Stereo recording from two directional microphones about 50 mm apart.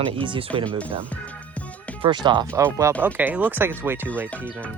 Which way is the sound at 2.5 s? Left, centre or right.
Right.